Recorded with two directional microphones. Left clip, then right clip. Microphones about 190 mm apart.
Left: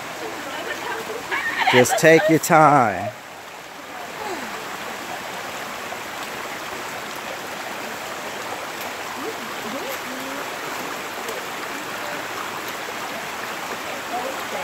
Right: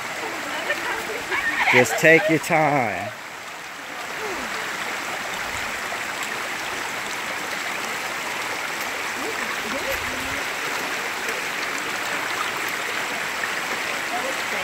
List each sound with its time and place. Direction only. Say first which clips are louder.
1.6 s neigh: left 2 dB; 45° left (ahead or behind)
2.0 s speech: left 2 dB; 20° left (ahead or behind)